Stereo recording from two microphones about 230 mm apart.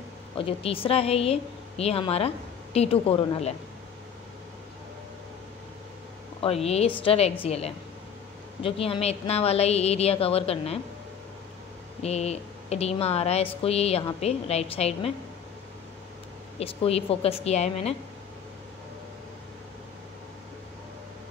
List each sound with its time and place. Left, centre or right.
0.4 s speech: left
6.4 s speech: left
12.0 s speech: left
16.5 s speech: left